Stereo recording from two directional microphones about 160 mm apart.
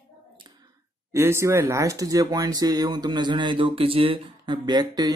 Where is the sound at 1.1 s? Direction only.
15° right (ahead or behind).